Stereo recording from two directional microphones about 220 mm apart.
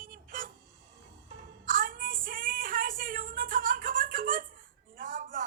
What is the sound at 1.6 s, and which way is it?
Child singing, 40° right (ahead or behind).